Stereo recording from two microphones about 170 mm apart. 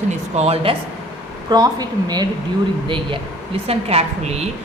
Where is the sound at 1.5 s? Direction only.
25° right (ahead or behind).